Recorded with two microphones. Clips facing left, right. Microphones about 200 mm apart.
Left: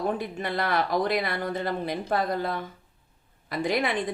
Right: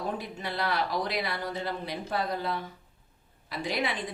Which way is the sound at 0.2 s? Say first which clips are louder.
Left 4 dB; 55° left (ahead or behind).